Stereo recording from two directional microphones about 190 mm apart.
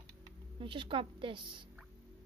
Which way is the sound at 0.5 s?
25° right (ahead or behind).